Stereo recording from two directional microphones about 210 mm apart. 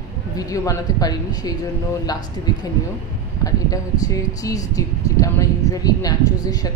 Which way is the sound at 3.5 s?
15° left (ahead or behind).